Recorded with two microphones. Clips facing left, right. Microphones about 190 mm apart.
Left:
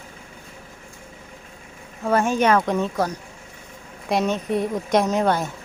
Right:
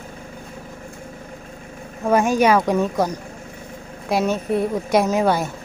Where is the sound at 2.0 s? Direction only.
10° right (ahead or behind).